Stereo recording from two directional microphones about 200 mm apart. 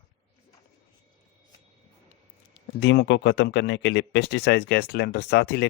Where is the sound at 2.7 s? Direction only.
60° left (ahead or behind).